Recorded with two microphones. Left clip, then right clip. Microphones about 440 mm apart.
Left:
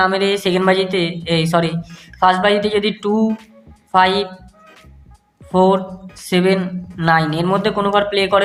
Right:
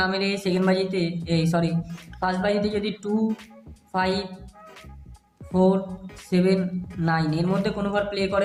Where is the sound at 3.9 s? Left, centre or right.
Right.